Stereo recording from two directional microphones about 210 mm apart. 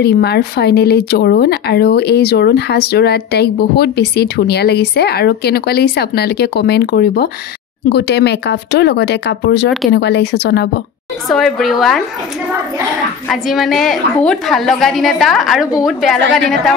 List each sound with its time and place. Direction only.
0.0 s speech: 50° left (ahead or behind)
11.2 s a woman's voice: centre (ahead or behind)
13.3 s a woman's voice: centre (ahead or behind)